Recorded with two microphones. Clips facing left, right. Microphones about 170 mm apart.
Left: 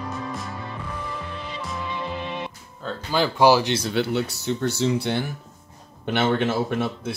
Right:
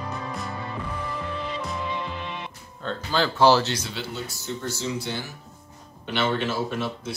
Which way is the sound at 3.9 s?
65° left (ahead or behind).